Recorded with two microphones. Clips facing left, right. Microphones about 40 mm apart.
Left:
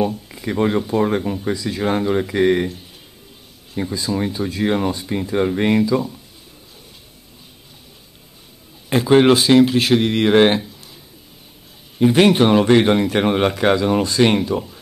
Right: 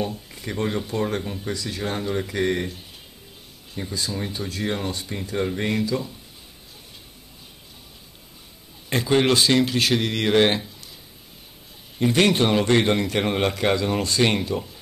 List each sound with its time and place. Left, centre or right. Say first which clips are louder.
0.3 s a sound: left 7 dB; centre
0.6 s speech: left 7 dB; left
1.9 s speech: left 8 dB; left
3.7 s a man's voice: left 7 dB; centre
8.8 s a man's voice: left 7 dB; centre
12.0 s a man's voice: left 6 dB; centre